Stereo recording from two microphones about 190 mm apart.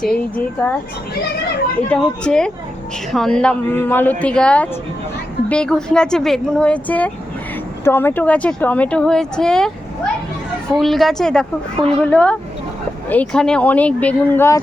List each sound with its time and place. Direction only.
0.0 s speech: 5° left (ahead or behind)
1.9 s speech: 5° left (ahead or behind)
10.8 s speech: centre (ahead or behind)